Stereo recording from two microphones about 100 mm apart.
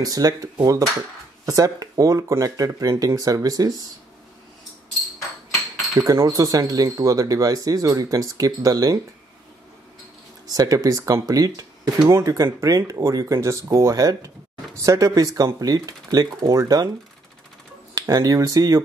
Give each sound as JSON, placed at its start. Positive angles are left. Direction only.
{"t": 0.0, "sound": "speech", "side_deg": -35}
{"t": 5.9, "sound": "speech", "side_deg": -35}
{"t": 10.5, "sound": "speech", "side_deg": -35}
{"t": 17.9, "sound": "speech", "side_deg": -40}